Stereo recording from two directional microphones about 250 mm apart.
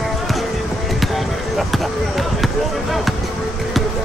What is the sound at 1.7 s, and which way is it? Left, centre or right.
Basketball bounce, centre.